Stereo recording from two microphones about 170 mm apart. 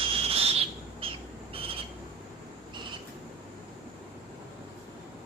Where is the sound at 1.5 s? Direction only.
35° right (ahead or behind).